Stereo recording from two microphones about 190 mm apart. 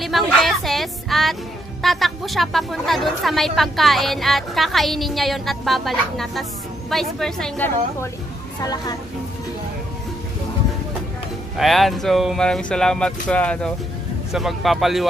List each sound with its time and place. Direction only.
0.0 s a sound: centre (ahead or behind)
1.8 s a woman's voice: centre (ahead or behind)
8.5 s speech: 20° left (ahead or behind)
11.5 s a woman's voice: centre (ahead or behind)